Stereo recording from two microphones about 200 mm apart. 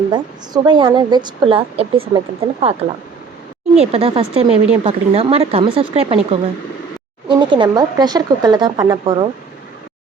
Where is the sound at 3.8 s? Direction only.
30° right (ahead or behind).